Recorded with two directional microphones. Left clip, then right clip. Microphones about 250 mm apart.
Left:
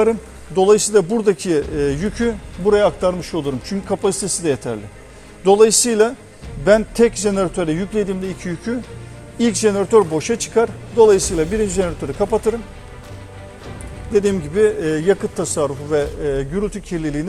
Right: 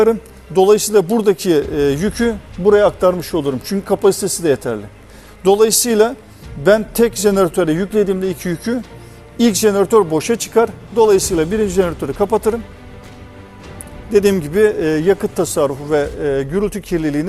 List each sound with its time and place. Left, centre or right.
0.0 s a man's voice: right
14.1 s a man's voice: right